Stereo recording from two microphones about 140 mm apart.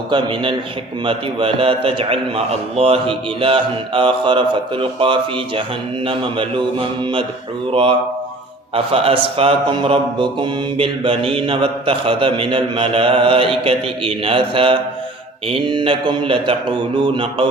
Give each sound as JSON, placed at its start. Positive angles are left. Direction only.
{"t": 0.1, "sound": "mantra", "side_deg": -35}
{"t": 8.7, "sound": "a man's voice", "side_deg": -40}
{"t": 9.4, "sound": "mantra", "side_deg": -40}